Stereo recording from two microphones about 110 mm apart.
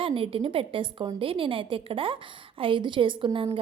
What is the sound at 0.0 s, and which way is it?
A woman's voice, 55° right (ahead or behind).